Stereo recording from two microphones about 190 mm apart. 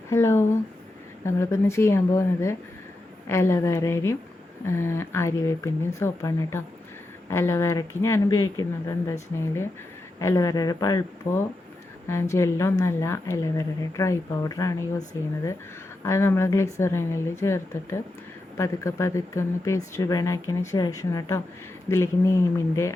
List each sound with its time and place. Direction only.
0.1 s speech: 15° left (ahead or behind)
10.2 s speech: 15° left (ahead or behind)
16.0 s speech: 15° left (ahead or behind)